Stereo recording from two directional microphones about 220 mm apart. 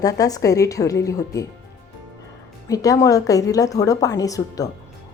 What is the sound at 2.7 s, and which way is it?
A woman's voice, 15° left (ahead or behind).